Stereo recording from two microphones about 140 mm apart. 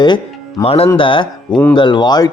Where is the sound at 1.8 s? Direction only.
30° left (ahead or behind).